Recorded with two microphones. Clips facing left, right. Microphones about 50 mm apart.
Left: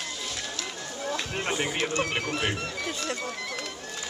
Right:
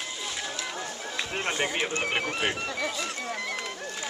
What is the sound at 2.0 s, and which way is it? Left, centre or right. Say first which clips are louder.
Music: even; centre.